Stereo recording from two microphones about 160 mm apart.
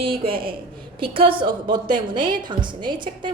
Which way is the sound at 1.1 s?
35° right (ahead or behind).